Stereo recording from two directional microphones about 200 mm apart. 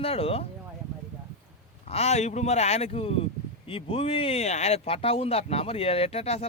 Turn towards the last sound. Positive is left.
turn(degrees=30)  # may be behind; listen again after turning